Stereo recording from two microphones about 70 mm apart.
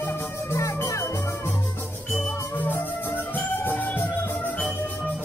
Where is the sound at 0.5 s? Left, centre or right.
Left.